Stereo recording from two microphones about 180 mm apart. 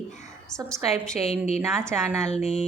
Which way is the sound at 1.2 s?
35° left (ahead or behind).